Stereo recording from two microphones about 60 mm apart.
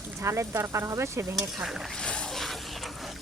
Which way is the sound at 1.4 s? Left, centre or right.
Centre.